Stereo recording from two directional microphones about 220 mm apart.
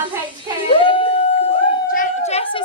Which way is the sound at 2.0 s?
30° left (ahead or behind).